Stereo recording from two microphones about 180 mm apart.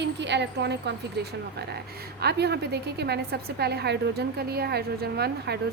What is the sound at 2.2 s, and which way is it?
A woman's voice, 65° right (ahead or behind).